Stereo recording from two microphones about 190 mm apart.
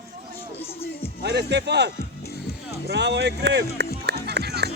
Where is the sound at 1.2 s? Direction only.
65° right (ahead or behind).